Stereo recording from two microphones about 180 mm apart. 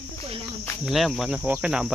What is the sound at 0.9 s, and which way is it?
Speech, centre (ahead or behind).